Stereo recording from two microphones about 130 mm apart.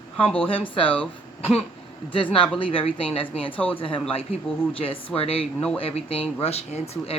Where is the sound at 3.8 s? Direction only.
45° left (ahead or behind).